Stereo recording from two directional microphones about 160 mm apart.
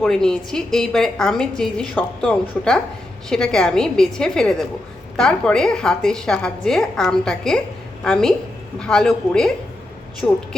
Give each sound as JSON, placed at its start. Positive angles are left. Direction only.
{"t": 0.0, "sound": "a woman's voice", "side_deg": 5}